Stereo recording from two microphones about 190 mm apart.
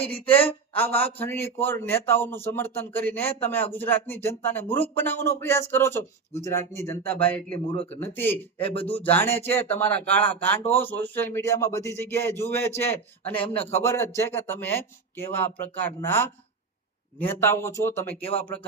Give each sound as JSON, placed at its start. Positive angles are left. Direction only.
{"t": 0.0, "sound": "speech", "side_deg": 10}
{"t": 13.4, "sound": "a man's voice", "side_deg": 30}
{"t": 13.7, "sound": "speech", "side_deg": 15}